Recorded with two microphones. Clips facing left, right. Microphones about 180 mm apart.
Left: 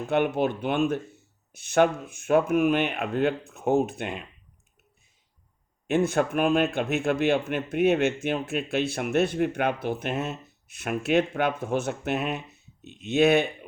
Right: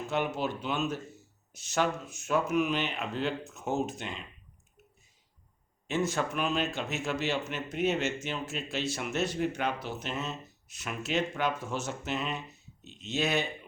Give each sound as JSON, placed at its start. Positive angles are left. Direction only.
{"t": 0.1, "sound": "speech", "side_deg": 55}
{"t": 5.9, "sound": "speech", "side_deg": 55}